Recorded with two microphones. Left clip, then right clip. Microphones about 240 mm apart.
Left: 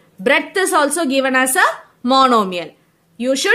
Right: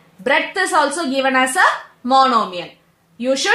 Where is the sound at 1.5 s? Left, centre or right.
Left.